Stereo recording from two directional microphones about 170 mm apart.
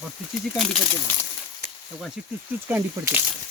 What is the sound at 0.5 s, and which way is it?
Speech, centre (ahead or behind).